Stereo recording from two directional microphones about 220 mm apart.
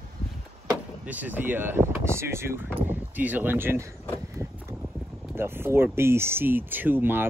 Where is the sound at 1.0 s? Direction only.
10° right (ahead or behind).